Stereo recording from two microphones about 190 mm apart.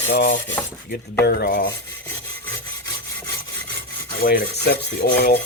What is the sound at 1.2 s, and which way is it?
Rub, 55° left (ahead or behind).